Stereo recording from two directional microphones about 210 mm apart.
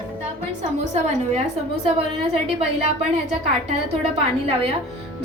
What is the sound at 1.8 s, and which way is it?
A woman's voice, 25° right (ahead or behind).